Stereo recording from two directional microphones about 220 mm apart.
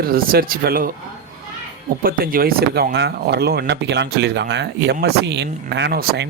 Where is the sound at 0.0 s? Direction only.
40° right (ahead or behind).